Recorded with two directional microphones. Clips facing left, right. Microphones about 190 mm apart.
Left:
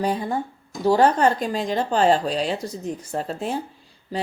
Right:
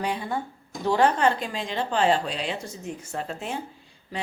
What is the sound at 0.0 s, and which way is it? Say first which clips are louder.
Speech: left 5 dB; 40° left (ahead or behind).